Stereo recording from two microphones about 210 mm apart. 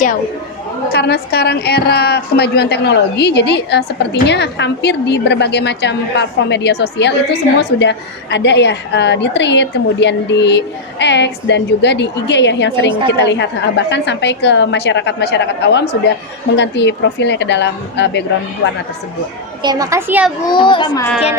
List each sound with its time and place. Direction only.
0.9 s a woman's voice: 50° left (ahead or behind)
19.6 s a child's voice: 15° right (ahead or behind)
20.5 s a child's voice: 20° left (ahead or behind)